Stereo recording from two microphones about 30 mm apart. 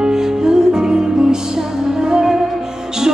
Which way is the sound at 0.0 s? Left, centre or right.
Centre.